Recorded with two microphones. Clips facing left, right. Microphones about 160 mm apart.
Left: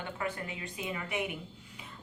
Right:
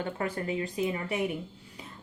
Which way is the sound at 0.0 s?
40° right (ahead or behind).